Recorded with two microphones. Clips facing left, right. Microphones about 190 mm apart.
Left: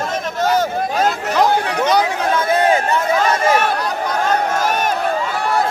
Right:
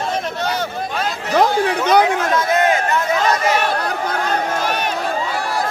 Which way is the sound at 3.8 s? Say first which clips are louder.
Left 1 dB; 55° right (ahead or behind).